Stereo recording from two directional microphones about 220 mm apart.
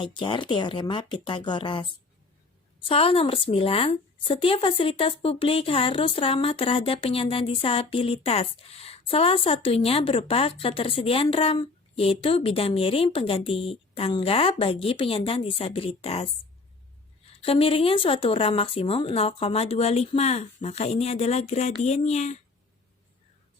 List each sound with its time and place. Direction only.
0.0 s speech: 20° left (ahead or behind)
2.9 s speech: 25° left (ahead or behind)
17.4 s speech: 25° left (ahead or behind)